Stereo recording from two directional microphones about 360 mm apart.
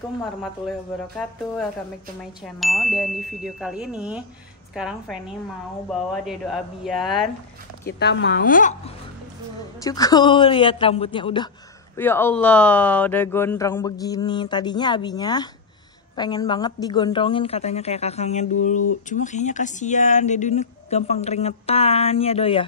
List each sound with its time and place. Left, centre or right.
2.4 s speech: centre
6.2 s speech: centre
8.0 s speech: left
9.8 s speech: centre